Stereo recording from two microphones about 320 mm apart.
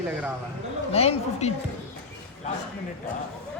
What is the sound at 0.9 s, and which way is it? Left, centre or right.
Speech, centre.